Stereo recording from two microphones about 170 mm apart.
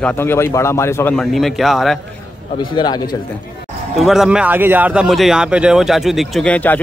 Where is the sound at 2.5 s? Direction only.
25° left (ahead or behind).